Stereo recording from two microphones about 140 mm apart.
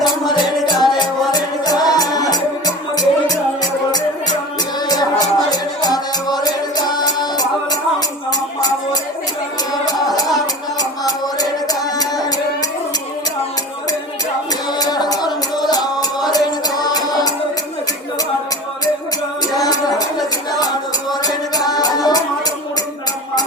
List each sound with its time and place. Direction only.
0.0 s music: 30° left (ahead or behind)
14.8 s music: 30° left (ahead or behind)
19.5 s a sound: 25° left (ahead or behind)
20.6 s music: 30° left (ahead or behind)